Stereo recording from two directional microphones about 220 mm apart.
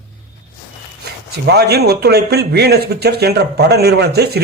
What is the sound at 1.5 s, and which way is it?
Speech, 45° right (ahead or behind).